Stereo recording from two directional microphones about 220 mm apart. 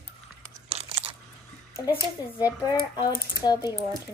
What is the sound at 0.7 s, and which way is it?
Crunch, 25° right (ahead or behind).